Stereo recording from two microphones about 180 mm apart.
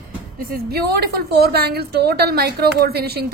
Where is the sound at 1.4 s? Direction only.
60° right (ahead or behind).